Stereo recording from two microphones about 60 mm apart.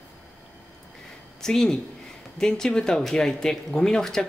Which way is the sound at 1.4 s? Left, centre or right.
Centre.